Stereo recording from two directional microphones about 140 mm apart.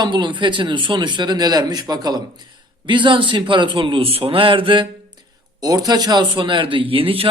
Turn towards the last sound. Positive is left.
turn(degrees=-40)  # may be behind; listen again after turning